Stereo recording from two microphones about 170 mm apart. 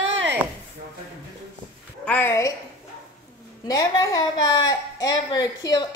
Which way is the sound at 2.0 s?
10° left (ahead or behind).